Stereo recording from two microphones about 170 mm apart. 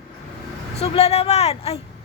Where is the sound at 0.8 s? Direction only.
35° left (ahead or behind).